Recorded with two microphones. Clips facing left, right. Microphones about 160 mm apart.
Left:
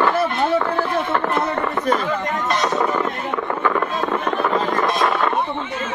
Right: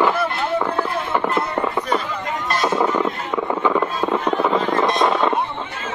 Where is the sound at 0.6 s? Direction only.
15° right (ahead or behind).